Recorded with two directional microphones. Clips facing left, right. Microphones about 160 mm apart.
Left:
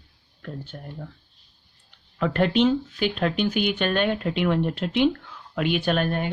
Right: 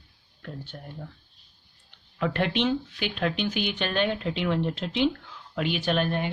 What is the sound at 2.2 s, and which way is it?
Speech, 45° left (ahead or behind).